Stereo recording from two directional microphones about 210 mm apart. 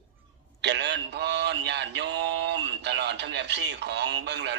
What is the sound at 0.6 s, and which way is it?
Mantra, 55° right (ahead or behind).